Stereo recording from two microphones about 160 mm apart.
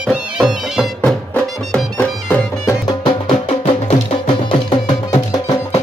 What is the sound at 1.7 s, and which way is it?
Music, 10° left (ahead or behind).